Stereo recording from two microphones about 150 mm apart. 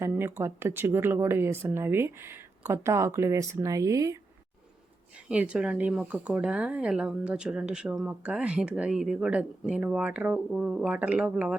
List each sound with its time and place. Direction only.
0.0 s speech: 15° right (ahead or behind)
5.1 s speech: 5° right (ahead or behind)